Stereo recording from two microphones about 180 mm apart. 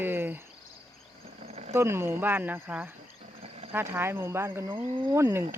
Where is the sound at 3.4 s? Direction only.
30° right (ahead or behind).